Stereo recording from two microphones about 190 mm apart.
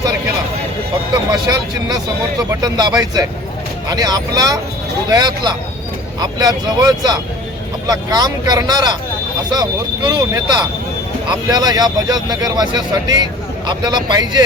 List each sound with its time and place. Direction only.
1.3 s speech: 20° right (ahead or behind)